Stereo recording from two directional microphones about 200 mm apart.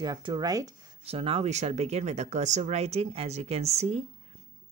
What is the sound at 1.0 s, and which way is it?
Speech, 30° right (ahead or behind).